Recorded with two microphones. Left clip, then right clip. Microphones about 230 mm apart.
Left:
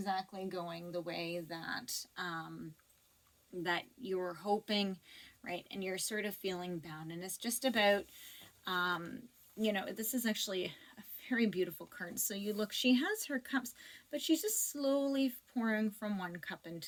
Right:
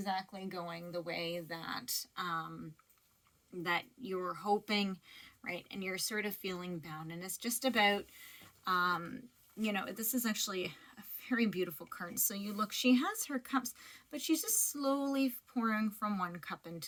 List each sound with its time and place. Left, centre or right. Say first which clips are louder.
0.0 s speech: even; right
3.6 s speech: right 1 dB; right